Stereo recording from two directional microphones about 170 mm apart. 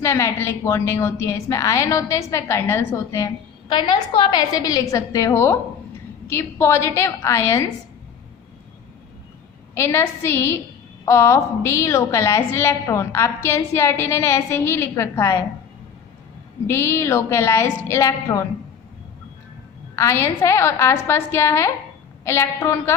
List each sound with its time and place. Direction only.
0.0 s a woman's voice: 15° left (ahead or behind)
3.7 s a woman's voice: 25° left (ahead or behind)
9.7 s a woman's voice: 15° left (ahead or behind)
16.6 s a woman's voice: 15° left (ahead or behind)
20.0 s a woman's voice: 15° left (ahead or behind)